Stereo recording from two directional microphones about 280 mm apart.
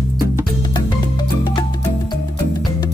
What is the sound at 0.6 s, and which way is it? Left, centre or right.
Music, centre.